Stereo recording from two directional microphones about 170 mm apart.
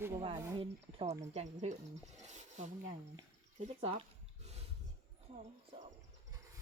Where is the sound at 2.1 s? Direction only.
45° right (ahead or behind).